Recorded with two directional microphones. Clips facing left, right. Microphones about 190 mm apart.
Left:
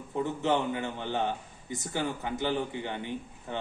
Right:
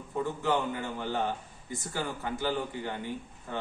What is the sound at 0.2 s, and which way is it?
A man's voice, 20° left (ahead or behind).